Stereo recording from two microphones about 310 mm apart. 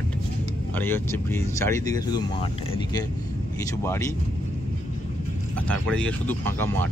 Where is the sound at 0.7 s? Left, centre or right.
Centre.